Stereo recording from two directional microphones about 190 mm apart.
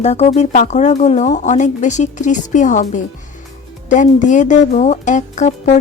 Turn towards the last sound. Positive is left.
turn(degrees=40)  # may be behind; listen again after turning